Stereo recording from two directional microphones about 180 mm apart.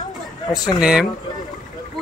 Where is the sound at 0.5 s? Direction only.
5° right (ahead or behind).